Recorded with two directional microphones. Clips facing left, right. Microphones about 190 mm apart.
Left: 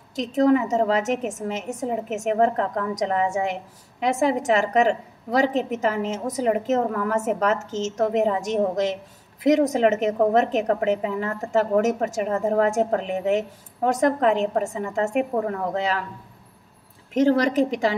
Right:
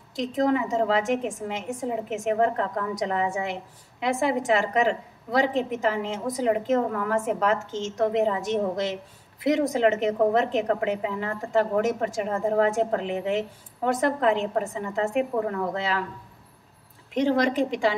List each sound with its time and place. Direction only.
0.1 s a woman's voice: 40° left (ahead or behind)
17.1 s a woman's voice: 40° left (ahead or behind)